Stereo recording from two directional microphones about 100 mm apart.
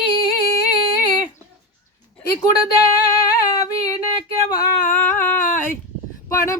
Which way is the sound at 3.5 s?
40° left (ahead or behind).